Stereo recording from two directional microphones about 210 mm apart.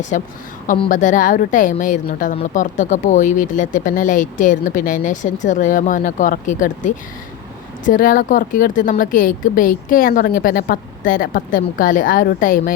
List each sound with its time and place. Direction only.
0.1 s a woman's voice: 40° left (ahead or behind)